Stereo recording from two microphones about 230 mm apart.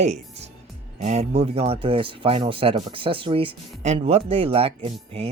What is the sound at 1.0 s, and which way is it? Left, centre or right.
Speech, right.